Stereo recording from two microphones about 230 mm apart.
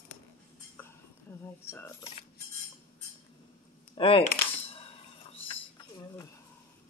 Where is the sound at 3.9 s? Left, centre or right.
Left.